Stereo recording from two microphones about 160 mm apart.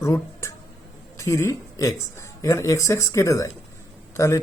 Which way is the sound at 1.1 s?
15° left (ahead or behind).